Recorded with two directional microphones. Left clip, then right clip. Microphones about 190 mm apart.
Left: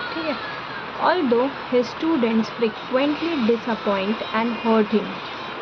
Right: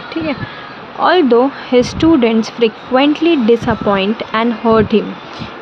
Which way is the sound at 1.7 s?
50° right (ahead or behind).